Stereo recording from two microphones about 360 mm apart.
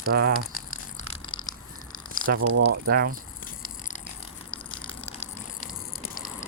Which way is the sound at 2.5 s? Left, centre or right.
Right.